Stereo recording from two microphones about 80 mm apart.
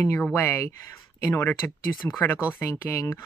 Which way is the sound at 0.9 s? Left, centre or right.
Left.